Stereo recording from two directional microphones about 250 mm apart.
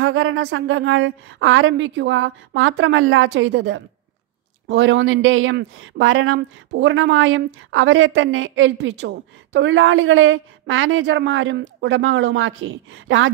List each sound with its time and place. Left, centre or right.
0.0 s speech: right